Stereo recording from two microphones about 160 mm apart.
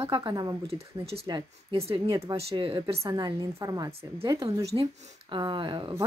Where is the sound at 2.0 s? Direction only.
25° right (ahead or behind).